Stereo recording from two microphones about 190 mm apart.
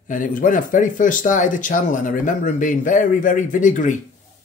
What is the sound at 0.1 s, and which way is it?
Speech, 45° left (ahead or behind).